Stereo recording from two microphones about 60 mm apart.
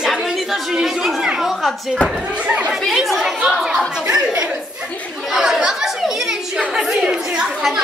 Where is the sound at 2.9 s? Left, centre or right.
Centre.